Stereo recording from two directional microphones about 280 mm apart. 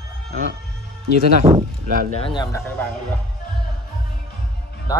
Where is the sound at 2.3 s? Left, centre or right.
Centre.